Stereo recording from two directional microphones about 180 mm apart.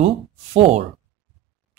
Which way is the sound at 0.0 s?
35° right (ahead or behind).